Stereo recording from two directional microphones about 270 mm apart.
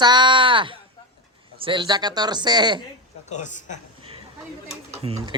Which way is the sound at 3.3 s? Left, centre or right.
Left.